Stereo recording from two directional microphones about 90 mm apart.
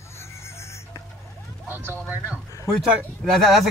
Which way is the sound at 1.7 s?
20° right (ahead or behind).